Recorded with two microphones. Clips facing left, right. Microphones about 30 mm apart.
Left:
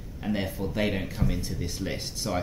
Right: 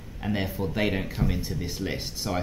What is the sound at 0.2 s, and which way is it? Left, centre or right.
Speech, centre.